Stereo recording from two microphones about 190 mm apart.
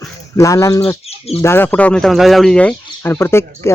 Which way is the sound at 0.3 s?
15° left (ahead or behind).